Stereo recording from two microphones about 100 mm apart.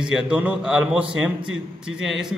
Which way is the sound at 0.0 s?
10° right (ahead or behind).